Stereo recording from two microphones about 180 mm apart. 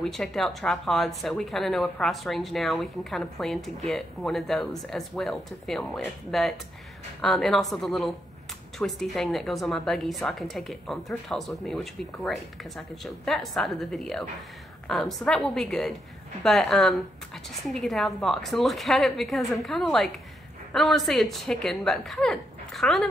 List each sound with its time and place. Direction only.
0.0 s speech: centre (ahead or behind)